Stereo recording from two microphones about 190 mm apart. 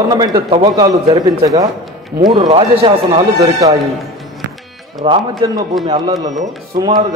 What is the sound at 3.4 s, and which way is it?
Speech, 20° right (ahead or behind).